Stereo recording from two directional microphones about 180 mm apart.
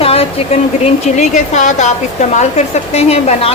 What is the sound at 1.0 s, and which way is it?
Speech, 40° left (ahead or behind).